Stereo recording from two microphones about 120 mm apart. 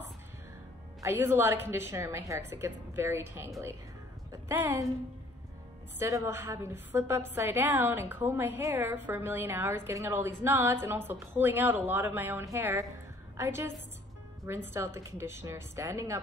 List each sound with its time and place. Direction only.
1.0 s a woman's voice: 20° right (ahead or behind)
5.9 s a woman's voice: 25° right (ahead or behind)